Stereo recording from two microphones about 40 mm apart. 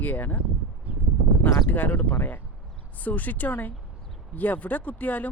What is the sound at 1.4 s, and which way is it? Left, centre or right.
Speech, left.